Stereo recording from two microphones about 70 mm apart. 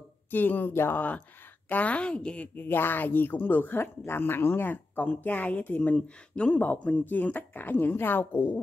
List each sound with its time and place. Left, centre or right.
0.3 s a woman's voice: left